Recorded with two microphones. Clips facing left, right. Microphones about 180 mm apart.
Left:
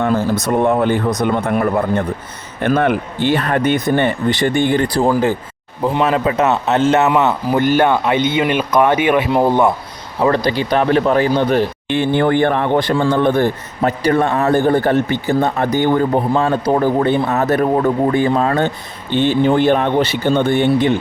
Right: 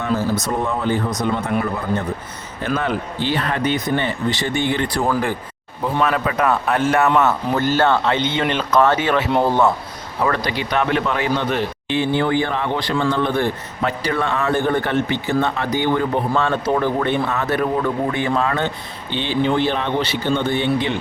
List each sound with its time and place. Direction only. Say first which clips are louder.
0.0 s a man's voice: left 4 dB; 55° left (ahead or behind); by 9.7 s 15° left (ahead or behind)
10.2 s speech: left 7 dB; 30° left (ahead or behind)
11.9 s a man's voice: left 3 dB; 55° left (ahead or behind)
16.3 s a man's voice: left 4 dB; 35° left (ahead or behind)